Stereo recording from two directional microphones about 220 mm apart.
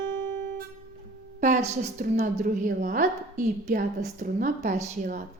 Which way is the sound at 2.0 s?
35° right (ahead or behind).